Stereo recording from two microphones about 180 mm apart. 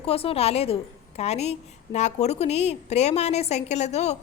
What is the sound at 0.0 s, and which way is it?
A woman's voice, 35° left (ahead or behind).